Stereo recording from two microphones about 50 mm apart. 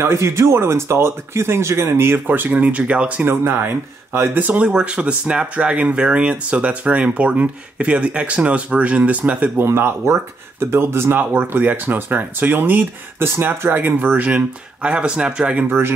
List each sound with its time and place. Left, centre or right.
0.0 s speech: right
2.2 s speech: right
3.3 s speech: right
4.4 s speech: right
4.6 s speech: centre
9.6 s speech: right
11.1 s speech: right
14.8 s speech: right
15.6 s speech: right